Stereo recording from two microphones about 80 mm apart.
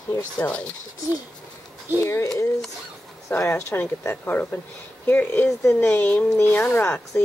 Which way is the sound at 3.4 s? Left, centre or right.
Left.